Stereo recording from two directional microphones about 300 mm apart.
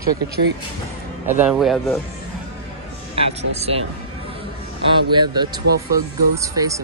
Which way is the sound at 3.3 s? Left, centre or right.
Right.